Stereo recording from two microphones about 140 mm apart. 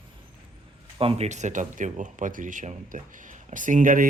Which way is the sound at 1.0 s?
40° right (ahead or behind).